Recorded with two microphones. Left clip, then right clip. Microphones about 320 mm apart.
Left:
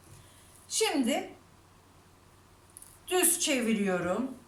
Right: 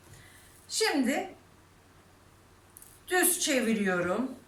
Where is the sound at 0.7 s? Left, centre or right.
Centre.